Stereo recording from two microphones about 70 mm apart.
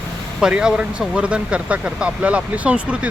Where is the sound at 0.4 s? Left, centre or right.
Centre.